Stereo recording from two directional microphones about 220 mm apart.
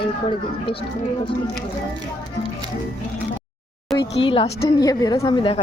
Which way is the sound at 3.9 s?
Centre (ahead or behind).